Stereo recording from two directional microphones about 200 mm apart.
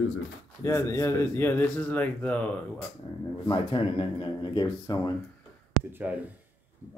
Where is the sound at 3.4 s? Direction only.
25° left (ahead or behind).